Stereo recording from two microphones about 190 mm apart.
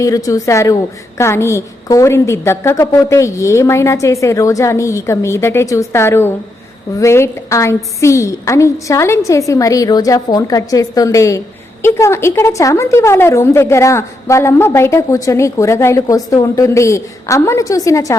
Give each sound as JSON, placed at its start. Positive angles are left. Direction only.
{"t": 0.0, "sound": "a woman's voice", "side_deg": 20}